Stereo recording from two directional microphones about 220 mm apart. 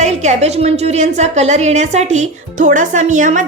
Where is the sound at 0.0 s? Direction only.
30° right (ahead or behind).